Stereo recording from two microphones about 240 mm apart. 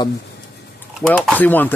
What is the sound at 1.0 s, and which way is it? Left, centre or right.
Speech, centre.